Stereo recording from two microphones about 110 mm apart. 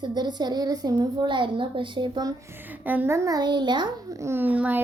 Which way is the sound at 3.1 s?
35° right (ahead or behind).